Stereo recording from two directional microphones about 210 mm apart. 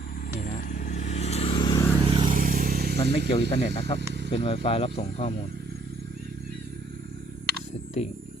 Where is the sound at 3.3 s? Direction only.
25° left (ahead or behind).